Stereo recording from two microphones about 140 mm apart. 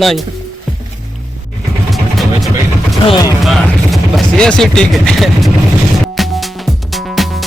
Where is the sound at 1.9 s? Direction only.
Centre (ahead or behind).